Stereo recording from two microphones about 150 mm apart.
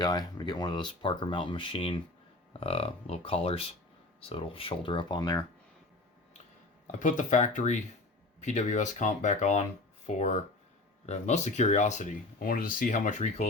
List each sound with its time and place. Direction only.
0.0 s speech: 25° left (ahead or behind)
6.8 s speech: 55° left (ahead or behind)
12.4 s speech: 70° left (ahead or behind); by 13.5 s 50° left (ahead or behind)